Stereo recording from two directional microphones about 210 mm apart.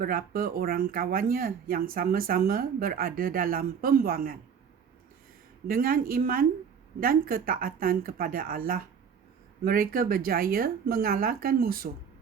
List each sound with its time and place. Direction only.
0.0 s speech: 45° right (ahead or behind)
5.6 s speech: 45° right (ahead or behind)